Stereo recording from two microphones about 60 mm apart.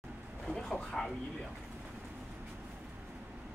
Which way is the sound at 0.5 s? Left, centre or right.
Centre.